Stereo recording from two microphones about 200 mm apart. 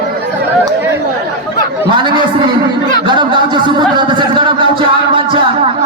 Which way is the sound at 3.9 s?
25° right (ahead or behind).